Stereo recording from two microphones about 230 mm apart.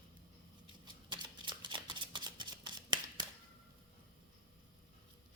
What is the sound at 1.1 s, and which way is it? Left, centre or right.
Shuffling cards, centre.